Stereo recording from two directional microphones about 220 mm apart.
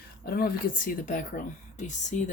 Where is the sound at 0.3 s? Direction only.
45° left (ahead or behind).